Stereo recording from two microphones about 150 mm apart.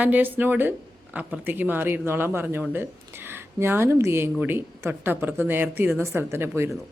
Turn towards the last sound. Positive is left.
turn(degrees=-15)  # may be behind; listen again after turning